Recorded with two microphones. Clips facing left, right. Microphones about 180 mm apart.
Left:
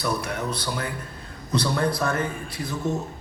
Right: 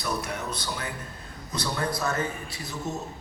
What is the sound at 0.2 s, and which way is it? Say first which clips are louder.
Speech: left 4 dB; 55° left (ahead or behind).